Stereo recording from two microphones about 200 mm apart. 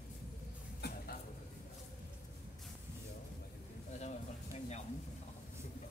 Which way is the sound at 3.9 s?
35° left (ahead or behind).